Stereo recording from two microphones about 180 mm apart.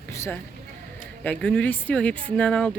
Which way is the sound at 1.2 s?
10° left (ahead or behind).